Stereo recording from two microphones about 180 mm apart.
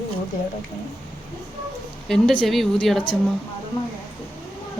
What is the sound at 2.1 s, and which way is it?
Speech, centre (ahead or behind).